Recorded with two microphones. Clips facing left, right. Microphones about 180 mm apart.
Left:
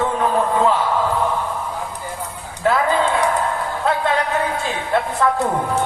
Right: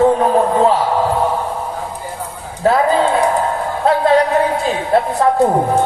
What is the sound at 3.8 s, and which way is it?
Music, 35° right (ahead or behind).